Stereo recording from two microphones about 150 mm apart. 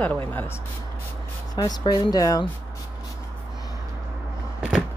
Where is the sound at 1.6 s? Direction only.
30° left (ahead or behind).